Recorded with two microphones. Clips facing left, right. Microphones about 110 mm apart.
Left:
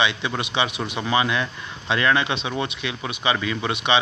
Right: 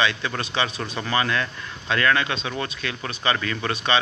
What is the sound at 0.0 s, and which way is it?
Speech, 15° left (ahead or behind).